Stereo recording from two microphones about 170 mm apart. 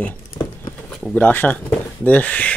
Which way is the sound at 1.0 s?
10° left (ahead or behind).